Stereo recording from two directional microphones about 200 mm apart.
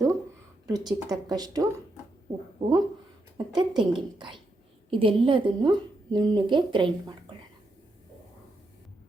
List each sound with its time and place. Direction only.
0.7 s a woman's voice: 20° right (ahead or behind)